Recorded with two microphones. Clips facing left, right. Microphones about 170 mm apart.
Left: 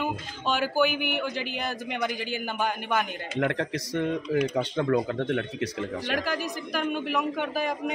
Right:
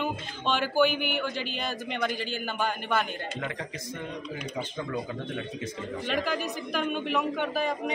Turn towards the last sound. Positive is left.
turn(degrees=10)  # may be behind; listen again after turning